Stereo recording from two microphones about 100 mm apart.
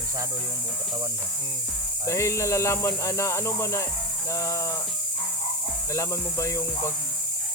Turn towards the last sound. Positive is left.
turn(degrees=30)  # may be behind; listen again after turning